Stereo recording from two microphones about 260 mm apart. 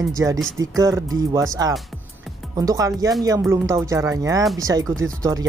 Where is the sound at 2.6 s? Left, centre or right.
Centre.